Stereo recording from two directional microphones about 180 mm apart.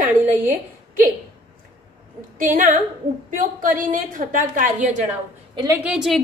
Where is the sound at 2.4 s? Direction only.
45° right (ahead or behind).